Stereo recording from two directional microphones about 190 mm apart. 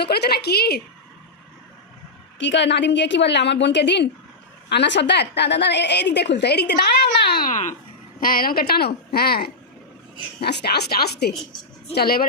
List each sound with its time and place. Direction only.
0.0 s a woman's voice: 60° left (ahead or behind)
2.4 s a woman's voice: 70° left (ahead or behind); by 7.8 s 40° left (ahead or behind)
8.2 s a woman's voice: 50° left (ahead or behind)